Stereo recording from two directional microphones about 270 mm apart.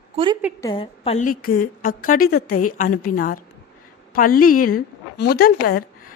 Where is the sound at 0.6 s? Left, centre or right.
Centre.